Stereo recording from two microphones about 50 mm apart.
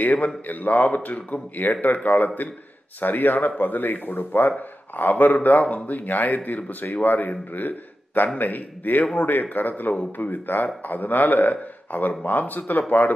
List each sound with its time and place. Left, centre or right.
0.0 s speech: left